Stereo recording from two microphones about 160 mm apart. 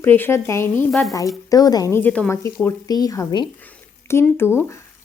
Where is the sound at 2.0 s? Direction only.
10° left (ahead or behind).